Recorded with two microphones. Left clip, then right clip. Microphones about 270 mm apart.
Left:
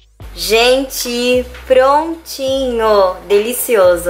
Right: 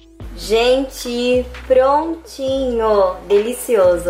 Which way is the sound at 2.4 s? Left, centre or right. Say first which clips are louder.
Left 3 dB; right.